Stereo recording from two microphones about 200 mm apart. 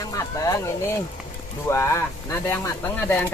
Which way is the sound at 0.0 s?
15° left (ahead or behind).